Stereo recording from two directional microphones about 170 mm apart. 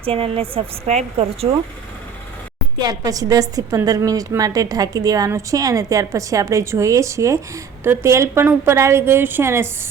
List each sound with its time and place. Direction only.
0.0 s speech: 35° right (ahead or behind)
2.8 s a woman's voice: 20° right (ahead or behind)